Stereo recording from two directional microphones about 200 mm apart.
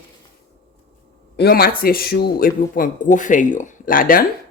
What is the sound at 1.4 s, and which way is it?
Speech, 50° left (ahead or behind).